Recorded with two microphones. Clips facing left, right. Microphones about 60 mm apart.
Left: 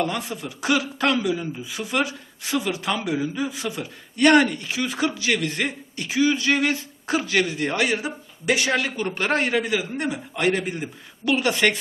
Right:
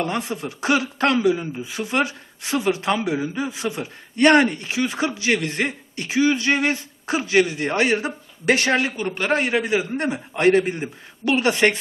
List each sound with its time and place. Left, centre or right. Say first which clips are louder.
0.0 s speech: right 1 dB; right
8.9 s a man's voice: right 1 dB; centre
9.6 s speech: right 2 dB; right
10.0 s a man's voice: right 4 dB; right